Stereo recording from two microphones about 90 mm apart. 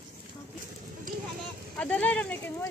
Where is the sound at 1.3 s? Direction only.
10° left (ahead or behind).